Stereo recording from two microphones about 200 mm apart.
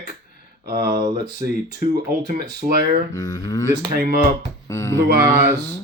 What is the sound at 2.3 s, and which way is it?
Speech, 45° right (ahead or behind).